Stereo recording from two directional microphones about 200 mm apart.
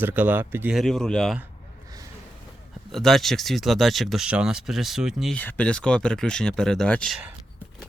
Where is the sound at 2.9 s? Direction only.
Centre (ahead or behind).